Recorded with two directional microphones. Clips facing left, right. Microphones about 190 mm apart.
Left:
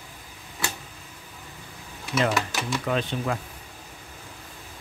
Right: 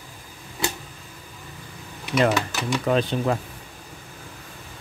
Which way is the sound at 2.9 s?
35° right (ahead or behind).